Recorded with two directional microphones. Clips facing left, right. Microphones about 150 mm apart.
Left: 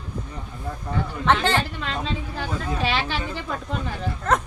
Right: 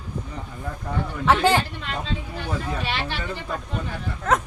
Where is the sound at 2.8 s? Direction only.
90° left.